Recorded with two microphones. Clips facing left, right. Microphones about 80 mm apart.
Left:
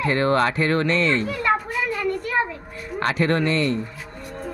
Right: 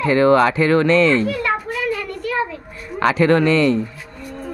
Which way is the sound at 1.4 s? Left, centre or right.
Left.